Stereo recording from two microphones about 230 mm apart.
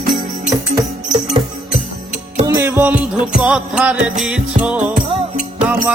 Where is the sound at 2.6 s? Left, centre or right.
Centre.